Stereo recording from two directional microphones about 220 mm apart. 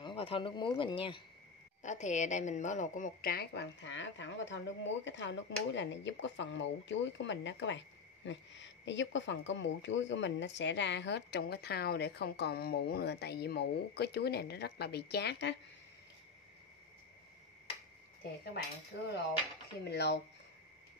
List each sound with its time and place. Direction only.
0.0 s a woman's voice: 25° left (ahead or behind); by 15.5 s 50° left (ahead or behind)
19.9 s speech: 50° left (ahead or behind)